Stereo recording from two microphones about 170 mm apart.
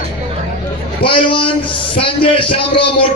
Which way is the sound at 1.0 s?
30° left (ahead or behind).